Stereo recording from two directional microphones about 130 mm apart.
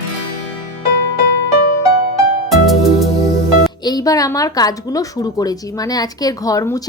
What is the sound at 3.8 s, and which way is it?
A woman's voice, 30° left (ahead or behind).